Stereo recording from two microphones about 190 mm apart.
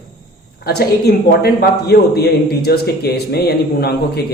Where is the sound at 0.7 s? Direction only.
55° left (ahead or behind).